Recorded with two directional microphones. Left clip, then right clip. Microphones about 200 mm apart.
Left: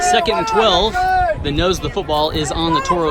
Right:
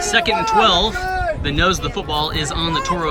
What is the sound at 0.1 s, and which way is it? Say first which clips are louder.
Speech: left 1 dB; 5° left (ahead or behind).